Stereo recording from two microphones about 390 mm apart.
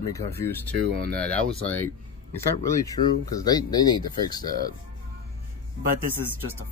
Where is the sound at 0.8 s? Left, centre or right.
Right.